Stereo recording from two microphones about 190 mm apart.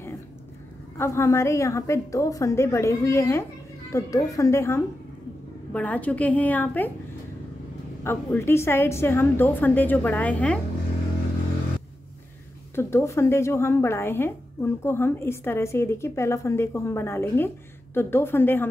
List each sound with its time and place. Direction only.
0.9 s a woman's voice: 15° left (ahead or behind)
8.0 s a woman's voice: 15° left (ahead or behind)
12.7 s a woman's voice: 15° left (ahead or behind)